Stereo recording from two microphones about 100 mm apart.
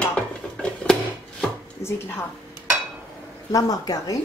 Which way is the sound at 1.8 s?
25° left (ahead or behind).